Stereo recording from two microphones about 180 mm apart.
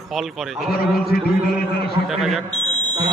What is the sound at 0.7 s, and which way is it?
Speech, 55° left (ahead or behind).